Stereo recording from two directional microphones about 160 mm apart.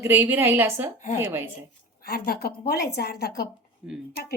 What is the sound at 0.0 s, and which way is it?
A woman's voice, 10° right (ahead or behind).